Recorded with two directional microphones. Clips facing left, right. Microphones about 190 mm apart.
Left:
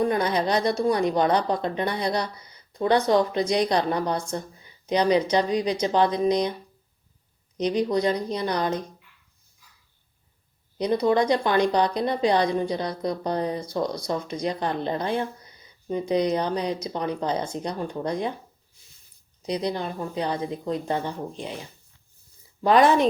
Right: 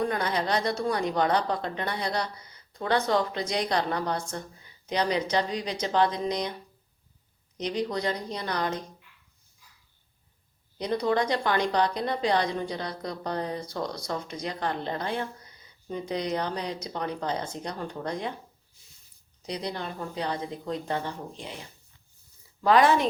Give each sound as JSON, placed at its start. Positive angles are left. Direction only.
{"t": 0.0, "sound": "a woman's voice", "side_deg": 15}
{"t": 7.6, "sound": "a woman's voice", "side_deg": 15}
{"t": 10.8, "sound": "a woman's voice", "side_deg": 15}
{"t": 19.5, "sound": "a woman's voice", "side_deg": 15}
{"t": 22.6, "sound": "a woman's voice", "side_deg": 20}